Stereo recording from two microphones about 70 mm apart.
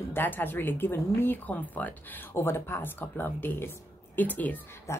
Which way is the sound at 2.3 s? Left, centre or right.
Left.